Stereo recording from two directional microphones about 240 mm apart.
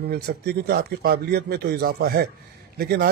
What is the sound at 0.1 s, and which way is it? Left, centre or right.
A man's voice, right.